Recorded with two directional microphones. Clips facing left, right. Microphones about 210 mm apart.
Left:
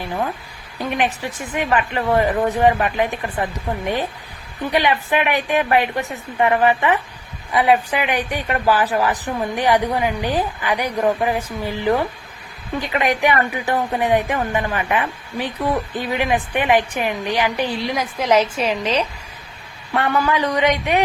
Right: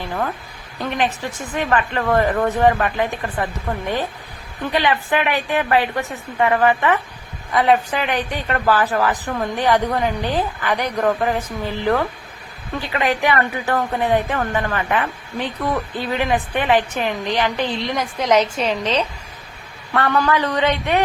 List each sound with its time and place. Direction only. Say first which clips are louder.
0.8 s a woman's voice: even; 10° left (ahead or behind)
4.7 s a woman's voice: left 1 dB; 15° left (ahead or behind)